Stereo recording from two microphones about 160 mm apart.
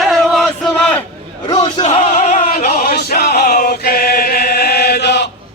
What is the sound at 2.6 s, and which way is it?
Choir, 75° left (ahead or behind).